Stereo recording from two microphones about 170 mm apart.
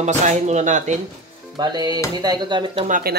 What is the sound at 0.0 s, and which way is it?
Speech, 45° right (ahead or behind).